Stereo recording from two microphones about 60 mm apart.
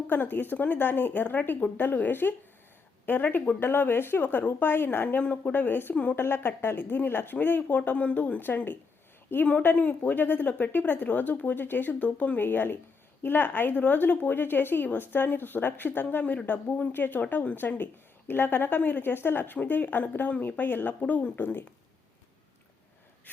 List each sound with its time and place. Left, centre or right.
0.1 s speech: left
5.0 s speech: left
5.9 s speech: left
6.1 s speech: left